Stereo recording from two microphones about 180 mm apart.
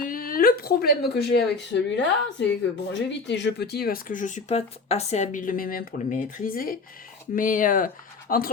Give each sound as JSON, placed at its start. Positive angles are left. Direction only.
{"t": 0.0, "sound": "speech", "side_deg": 50}